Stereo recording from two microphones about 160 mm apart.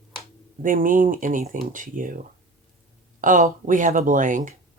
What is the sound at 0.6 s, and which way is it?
Speech, 60° right (ahead or behind).